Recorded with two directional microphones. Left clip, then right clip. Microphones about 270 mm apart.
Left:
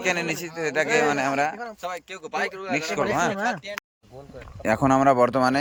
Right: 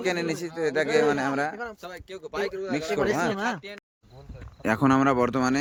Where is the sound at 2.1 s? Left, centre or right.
Centre.